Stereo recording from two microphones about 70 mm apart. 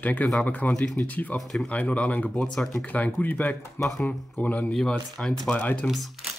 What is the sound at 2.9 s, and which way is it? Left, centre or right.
Speech, left.